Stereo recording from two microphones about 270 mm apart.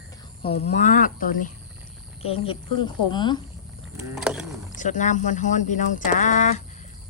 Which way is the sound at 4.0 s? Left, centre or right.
Centre.